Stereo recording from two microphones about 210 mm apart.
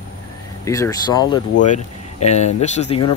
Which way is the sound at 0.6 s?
15° left (ahead or behind).